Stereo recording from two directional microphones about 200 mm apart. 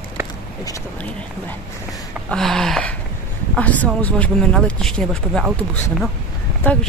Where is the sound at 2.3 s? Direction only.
Centre (ahead or behind).